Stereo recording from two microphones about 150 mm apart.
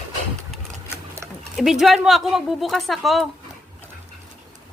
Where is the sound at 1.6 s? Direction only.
Centre (ahead or behind).